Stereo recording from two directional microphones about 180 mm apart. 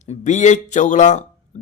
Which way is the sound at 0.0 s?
40° left (ahead or behind).